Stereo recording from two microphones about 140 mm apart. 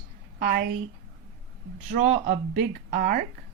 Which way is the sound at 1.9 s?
75° right (ahead or behind).